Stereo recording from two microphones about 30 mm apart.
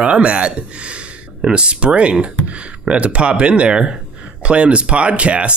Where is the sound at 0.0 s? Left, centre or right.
Right.